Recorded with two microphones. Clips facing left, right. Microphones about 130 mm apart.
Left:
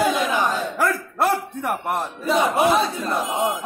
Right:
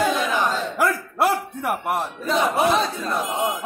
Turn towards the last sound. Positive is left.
turn(degrees=0)  # may be behind; listen again after turning